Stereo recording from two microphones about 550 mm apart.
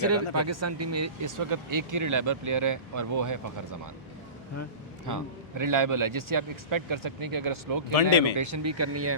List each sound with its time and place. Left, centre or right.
0.0 s speech: right
5.0 s speech: right
8.1 s speech: left
8.4 s speech: right